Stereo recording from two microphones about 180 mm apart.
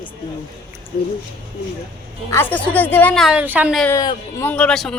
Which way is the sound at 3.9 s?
25° left (ahead or behind).